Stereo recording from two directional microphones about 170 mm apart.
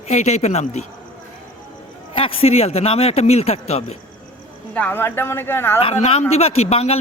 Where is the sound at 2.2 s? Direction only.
35° left (ahead or behind).